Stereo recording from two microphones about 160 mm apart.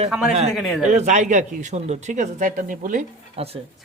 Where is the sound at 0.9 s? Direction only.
45° right (ahead or behind).